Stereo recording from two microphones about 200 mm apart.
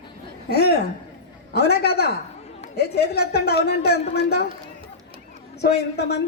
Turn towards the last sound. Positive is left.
turn(degrees=55)  # may be behind; listen again after turning